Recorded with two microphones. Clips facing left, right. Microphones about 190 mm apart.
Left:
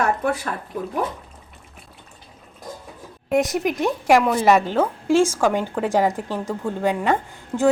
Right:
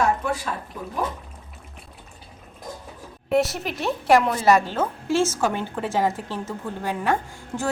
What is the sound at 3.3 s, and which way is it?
A woman's voice, 15° left (ahead or behind).